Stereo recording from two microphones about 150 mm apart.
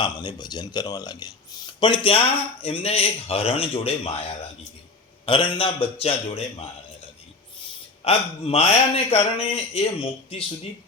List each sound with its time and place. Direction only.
0.0 s speech: 30° left (ahead or behind)
5.2 s speech: 35° left (ahead or behind)
8.0 s a man's voice: 40° left (ahead or behind)